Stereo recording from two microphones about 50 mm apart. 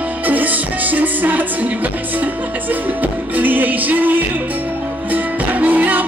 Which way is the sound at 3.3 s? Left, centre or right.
Right.